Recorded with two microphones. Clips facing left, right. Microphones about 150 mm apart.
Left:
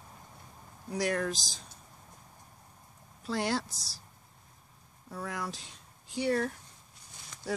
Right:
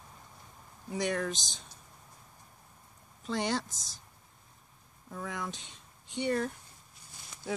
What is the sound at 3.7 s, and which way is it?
Speech, 35° left (ahead or behind).